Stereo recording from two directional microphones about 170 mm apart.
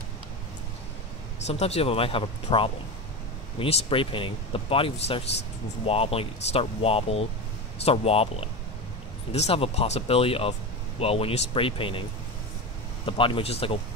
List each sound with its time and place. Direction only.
1.4 s speech: 40° left (ahead or behind)
13.0 s speech: 30° left (ahead or behind)